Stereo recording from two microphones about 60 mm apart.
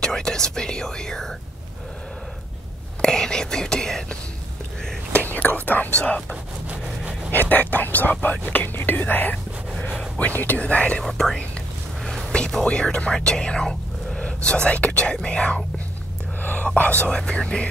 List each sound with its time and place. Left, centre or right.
0.0 s speech: centre
3.0 s speech: centre
5.1 s speech: left
7.3 s speech: left
10.4 s speech: left
11.0 s speech: centre
16.7 s speech: left